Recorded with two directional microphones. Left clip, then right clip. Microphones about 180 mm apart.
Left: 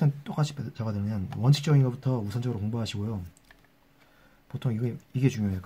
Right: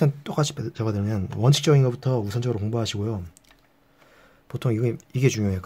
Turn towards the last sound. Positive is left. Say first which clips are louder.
# right 6 dB
turn(degrees=-55)  # may be behind; listen again after turning